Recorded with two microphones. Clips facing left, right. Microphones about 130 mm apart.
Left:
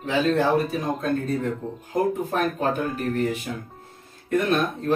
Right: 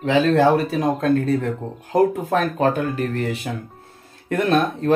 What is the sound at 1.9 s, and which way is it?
Speech, 90° right.